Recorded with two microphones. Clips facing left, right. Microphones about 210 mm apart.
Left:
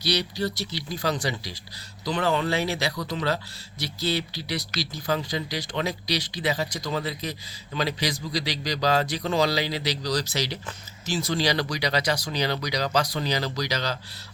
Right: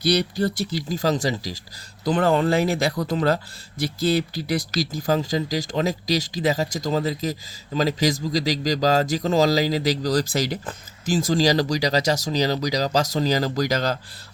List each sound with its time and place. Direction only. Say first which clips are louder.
0.1 s speech: right 5 dB; 50° right (ahead or behind)